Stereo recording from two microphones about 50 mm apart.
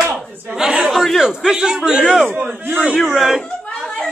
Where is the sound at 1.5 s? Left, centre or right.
Centre.